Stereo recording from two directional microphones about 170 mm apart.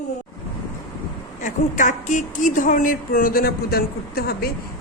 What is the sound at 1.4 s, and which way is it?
A woman's voice, 50° left (ahead or behind).